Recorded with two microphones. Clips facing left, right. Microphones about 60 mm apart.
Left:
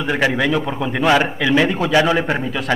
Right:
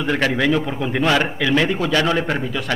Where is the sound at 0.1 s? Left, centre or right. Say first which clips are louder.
Left 1 dB; centre.